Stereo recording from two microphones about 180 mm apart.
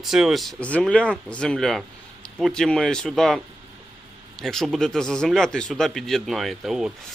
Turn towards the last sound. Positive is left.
turn(degrees=0)  # may be behind; listen again after turning